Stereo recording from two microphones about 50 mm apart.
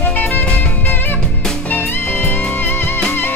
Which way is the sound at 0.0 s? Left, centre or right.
Left.